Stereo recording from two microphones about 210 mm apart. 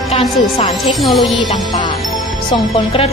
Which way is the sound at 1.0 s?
Centre (ahead or behind).